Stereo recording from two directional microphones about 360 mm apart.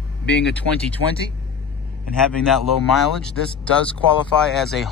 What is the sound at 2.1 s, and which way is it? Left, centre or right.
Speech, centre.